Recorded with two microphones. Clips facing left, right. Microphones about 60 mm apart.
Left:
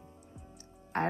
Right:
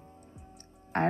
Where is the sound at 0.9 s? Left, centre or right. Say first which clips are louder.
Right 4 dB; right.